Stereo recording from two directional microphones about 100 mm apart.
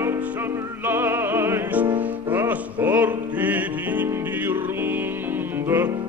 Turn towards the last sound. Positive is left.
turn(degrees=-20)  # may be behind; listen again after turning